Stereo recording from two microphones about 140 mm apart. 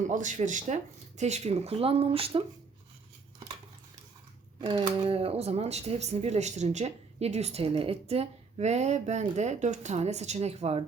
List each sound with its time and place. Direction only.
0.0 s speech: 60° right (ahead or behind); by 2.4 s 40° right (ahead or behind)
4.6 s speech: 35° right (ahead or behind)